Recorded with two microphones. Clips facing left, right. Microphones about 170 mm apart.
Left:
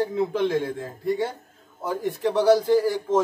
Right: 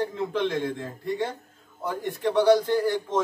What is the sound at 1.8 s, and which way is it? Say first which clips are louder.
A man's voice: left 2 dB; 5° left (ahead or behind).